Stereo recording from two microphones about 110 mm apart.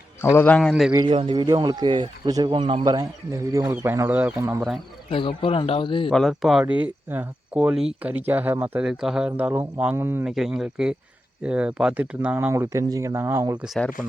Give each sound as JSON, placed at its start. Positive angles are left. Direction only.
{"t": 0.2, "sound": "speech", "side_deg": 20}
{"t": 0.7, "sound": "speech", "side_deg": -10}
{"t": 1.1, "sound": "speech", "side_deg": -50}
{"t": 2.8, "sound": "speech", "side_deg": -40}
{"t": 4.4, "sound": "speech", "side_deg": -25}
{"t": 5.1, "sound": "a man's voice", "side_deg": 50}
{"t": 6.1, "sound": "speech", "side_deg": 0}
{"t": 7.1, "sound": "speech", "side_deg": -15}
{"t": 8.9, "sound": "speech", "side_deg": -5}
{"t": 9.4, "sound": "speech", "side_deg": -15}
{"t": 10.2, "sound": "speech", "side_deg": -5}
{"t": 12.9, "sound": "speech", "side_deg": -35}
{"t": 13.1, "sound": "speech", "side_deg": -25}